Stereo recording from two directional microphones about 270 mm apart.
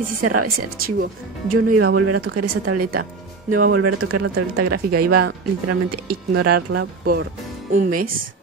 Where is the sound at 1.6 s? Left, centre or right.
Right.